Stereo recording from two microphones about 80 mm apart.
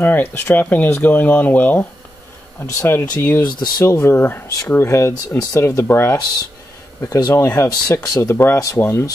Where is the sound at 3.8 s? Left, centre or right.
Left.